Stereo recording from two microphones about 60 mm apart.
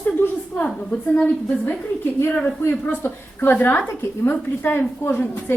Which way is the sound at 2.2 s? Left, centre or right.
Left.